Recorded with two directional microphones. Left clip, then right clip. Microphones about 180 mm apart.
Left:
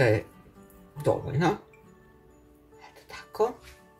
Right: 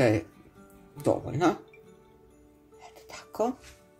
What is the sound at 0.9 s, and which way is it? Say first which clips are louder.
Speech: even; 45° right (ahead or behind).